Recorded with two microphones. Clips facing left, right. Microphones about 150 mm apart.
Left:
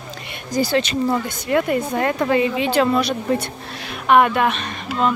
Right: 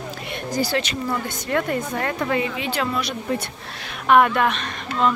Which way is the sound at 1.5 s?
10° left (ahead or behind).